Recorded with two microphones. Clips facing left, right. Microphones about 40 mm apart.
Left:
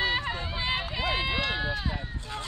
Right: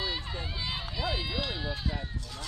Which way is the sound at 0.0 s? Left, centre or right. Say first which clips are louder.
Left 7 dB; left.